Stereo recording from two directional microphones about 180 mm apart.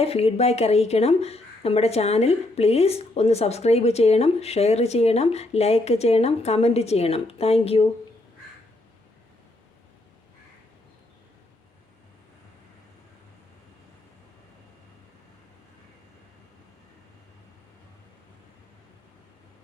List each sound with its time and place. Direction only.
0.0 s speech: 35° left (ahead or behind)